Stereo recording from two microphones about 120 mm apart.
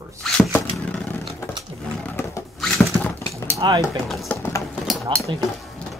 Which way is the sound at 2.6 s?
Centre (ahead or behind).